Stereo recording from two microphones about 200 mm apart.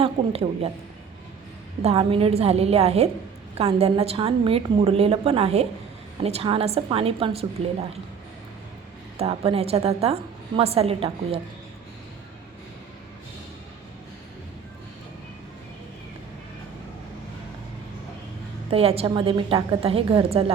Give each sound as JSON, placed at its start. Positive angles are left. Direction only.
{"t": 0.0, "sound": "a woman's voice", "side_deg": -30}
{"t": 1.8, "sound": "a woman's voice", "side_deg": -30}
{"t": 9.1, "sound": "a woman's voice", "side_deg": -30}
{"t": 18.7, "sound": "a woman's voice", "side_deg": -30}